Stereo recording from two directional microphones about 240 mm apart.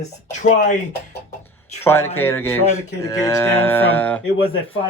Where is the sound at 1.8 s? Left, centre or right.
Centre.